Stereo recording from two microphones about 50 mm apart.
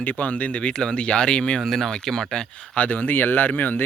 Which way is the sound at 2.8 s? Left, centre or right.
Left.